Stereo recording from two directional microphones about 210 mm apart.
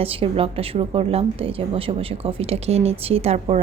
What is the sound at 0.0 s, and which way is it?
A woman's voice, 25° right (ahead or behind).